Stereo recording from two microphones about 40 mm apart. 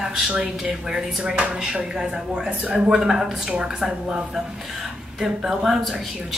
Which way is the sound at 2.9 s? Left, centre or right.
Centre.